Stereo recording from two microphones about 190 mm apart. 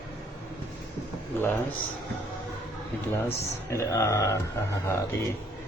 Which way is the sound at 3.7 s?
15° left (ahead or behind).